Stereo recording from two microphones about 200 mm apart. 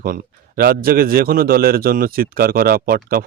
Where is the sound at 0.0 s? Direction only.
50° right (ahead or behind).